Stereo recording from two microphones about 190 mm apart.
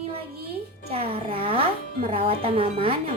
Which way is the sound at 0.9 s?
30° right (ahead or behind).